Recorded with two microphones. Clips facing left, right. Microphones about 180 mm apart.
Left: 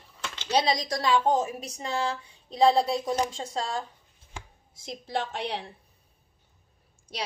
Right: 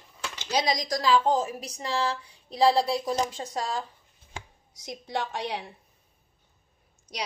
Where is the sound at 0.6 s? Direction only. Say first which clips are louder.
Right 3 dB; 30° left (ahead or behind).